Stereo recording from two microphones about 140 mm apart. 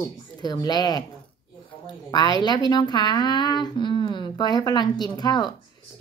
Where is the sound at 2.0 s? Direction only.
30° left (ahead or behind).